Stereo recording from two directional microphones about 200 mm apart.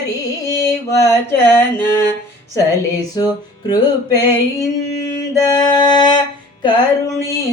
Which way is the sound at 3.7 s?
20° left (ahead or behind).